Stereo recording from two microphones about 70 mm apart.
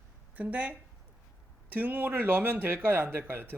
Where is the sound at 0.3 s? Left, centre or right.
Centre.